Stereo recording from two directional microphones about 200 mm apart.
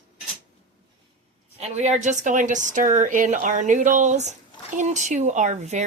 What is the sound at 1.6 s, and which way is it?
Speech, 35° right (ahead or behind).